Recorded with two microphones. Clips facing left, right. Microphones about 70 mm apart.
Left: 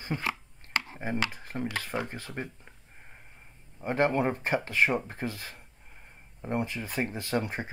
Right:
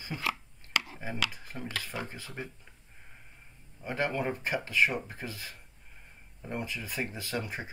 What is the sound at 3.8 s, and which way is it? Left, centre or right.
Speech, left.